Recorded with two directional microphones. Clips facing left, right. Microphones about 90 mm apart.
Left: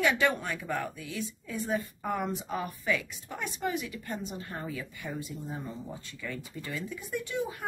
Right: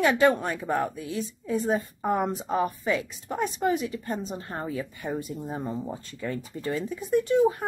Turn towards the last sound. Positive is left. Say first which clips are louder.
# right 12 dB
turn(degrees=-35)  # may be behind; listen again after turning